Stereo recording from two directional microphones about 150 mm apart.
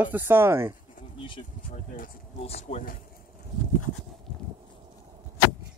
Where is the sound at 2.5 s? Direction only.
45° left (ahead or behind).